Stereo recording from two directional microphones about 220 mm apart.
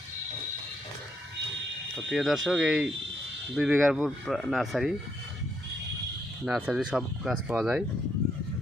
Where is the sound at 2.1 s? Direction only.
Centre (ahead or behind).